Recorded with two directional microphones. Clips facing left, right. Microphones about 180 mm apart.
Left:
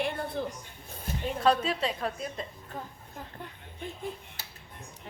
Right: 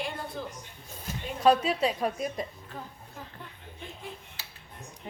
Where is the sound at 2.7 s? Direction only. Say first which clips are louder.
Left 2 dB; 40° left (ahead or behind).